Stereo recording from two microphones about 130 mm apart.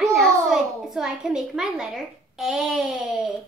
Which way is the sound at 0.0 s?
Centre (ahead or behind).